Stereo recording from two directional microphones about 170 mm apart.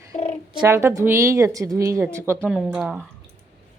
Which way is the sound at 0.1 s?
40° left (ahead or behind).